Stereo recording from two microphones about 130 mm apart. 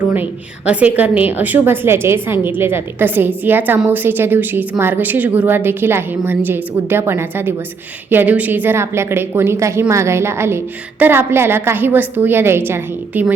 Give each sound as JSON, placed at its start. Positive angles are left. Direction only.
{"t": 0.1, "sound": "a woman's voice", "side_deg": -10}